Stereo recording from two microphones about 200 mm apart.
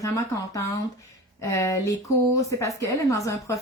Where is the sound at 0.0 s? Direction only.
15° left (ahead or behind).